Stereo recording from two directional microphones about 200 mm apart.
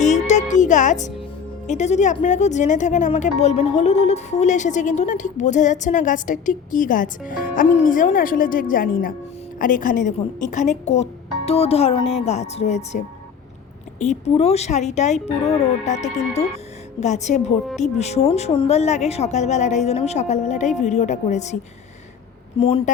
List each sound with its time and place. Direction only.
0.0 s music: 35° left (ahead or behind)
1.6 s speech: 35° left (ahead or behind)
14.0 s a woman's voice: 35° left (ahead or behind)